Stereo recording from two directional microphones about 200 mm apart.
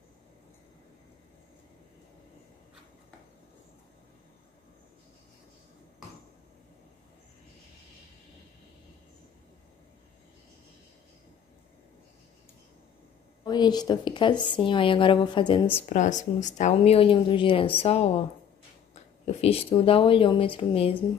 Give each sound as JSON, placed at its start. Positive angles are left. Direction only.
{"t": 13.4, "sound": "speech", "side_deg": 20}
{"t": 15.9, "sound": "speech", "side_deg": 35}
{"t": 19.2, "sound": "speech", "side_deg": 30}